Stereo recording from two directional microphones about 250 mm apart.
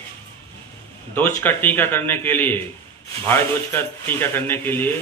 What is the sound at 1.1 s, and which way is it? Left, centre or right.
Speech, centre.